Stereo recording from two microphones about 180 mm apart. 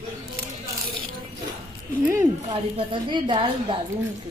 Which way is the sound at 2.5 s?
25° right (ahead or behind).